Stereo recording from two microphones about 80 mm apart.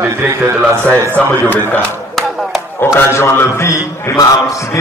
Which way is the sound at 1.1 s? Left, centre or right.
Left.